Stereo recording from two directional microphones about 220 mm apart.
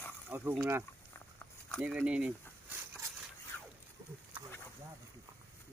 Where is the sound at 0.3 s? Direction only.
10° right (ahead or behind).